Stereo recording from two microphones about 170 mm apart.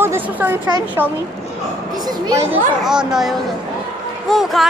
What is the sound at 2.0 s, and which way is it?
Speech, 25° right (ahead or behind).